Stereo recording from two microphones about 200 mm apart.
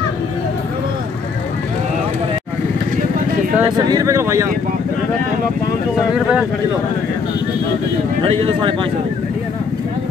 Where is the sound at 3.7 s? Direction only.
20° right (ahead or behind).